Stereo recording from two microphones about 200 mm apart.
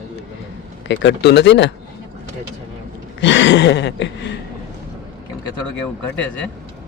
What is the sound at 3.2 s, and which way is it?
Speech, 65° left (ahead or behind).